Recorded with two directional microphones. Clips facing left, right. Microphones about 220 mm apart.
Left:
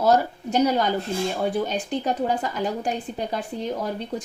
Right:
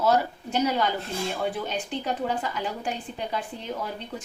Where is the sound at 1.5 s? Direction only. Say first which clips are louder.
Left 5 dB; 40° left (ahead or behind).